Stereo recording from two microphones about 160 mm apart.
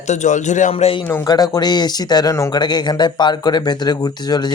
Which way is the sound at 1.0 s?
20° left (ahead or behind).